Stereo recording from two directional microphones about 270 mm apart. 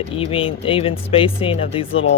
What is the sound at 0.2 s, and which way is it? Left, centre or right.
Speech, left.